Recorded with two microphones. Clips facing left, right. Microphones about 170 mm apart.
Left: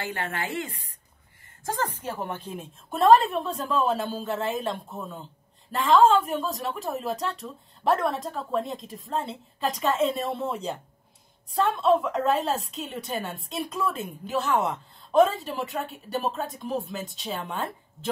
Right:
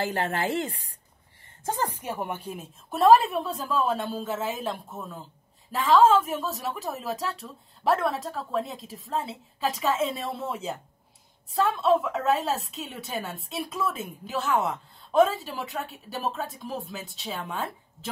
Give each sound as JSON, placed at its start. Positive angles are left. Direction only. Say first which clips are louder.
{"t": 0.0, "sound": "a woman's voice", "louder": "right 4 dB", "side_deg": -40}
{"t": 1.7, "sound": "a woman's voice", "louder": "even", "side_deg": -15}